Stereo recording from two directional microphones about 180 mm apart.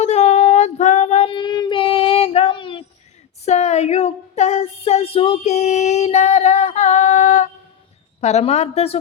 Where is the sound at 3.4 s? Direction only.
40° left (ahead or behind).